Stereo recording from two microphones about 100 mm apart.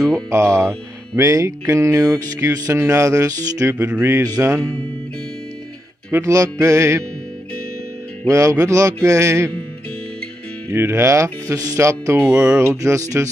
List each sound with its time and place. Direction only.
0.0 s speech: 30° right (ahead or behind)
6.1 s speech: 30° right (ahead or behind)
8.3 s speech: 30° right (ahead or behind)
10.7 s speech: 25° right (ahead or behind)